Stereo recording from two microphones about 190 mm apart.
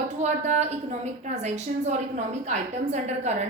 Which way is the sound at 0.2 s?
35° right (ahead or behind).